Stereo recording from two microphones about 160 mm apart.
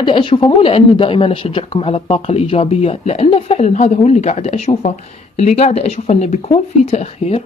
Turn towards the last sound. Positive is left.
turn(degrees=45)  # may be behind; listen again after turning